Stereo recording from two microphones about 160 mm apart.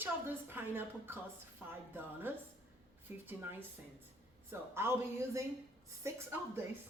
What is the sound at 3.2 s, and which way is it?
Speech, 15° right (ahead or behind).